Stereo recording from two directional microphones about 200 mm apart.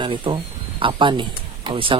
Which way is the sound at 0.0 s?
25° right (ahead or behind).